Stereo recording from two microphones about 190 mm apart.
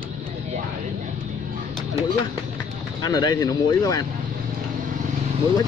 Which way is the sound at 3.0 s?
20° left (ahead or behind).